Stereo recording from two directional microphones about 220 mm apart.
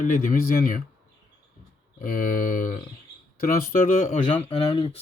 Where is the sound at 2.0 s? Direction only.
40° left (ahead or behind).